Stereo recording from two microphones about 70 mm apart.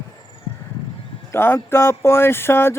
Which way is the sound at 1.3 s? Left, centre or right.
Left.